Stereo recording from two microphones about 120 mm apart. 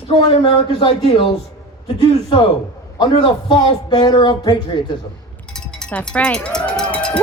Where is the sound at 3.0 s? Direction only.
45° left (ahead or behind).